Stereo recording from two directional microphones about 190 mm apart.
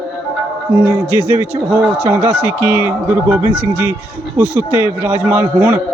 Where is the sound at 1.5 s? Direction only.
10° right (ahead or behind).